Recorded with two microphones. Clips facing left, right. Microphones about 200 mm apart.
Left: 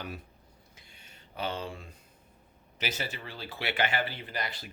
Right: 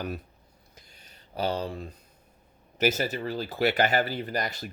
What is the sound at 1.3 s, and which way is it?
Speech, 40° right (ahead or behind).